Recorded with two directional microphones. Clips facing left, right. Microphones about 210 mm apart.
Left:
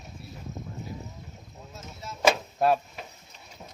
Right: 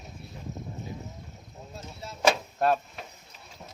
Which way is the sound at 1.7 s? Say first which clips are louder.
Even; 30° right (ahead or behind).